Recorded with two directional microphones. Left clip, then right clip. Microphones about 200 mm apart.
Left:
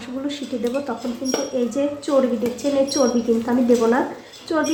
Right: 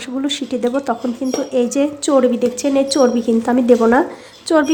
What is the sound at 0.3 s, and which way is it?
A woman's voice, 50° right (ahead or behind).